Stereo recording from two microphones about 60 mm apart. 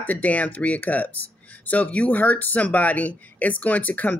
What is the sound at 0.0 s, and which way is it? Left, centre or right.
Speech, left.